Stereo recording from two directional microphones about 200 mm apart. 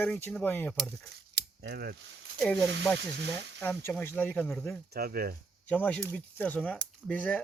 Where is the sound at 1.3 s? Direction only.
55° right (ahead or behind).